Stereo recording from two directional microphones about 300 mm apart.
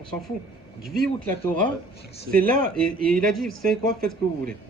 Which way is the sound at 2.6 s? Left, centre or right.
Centre.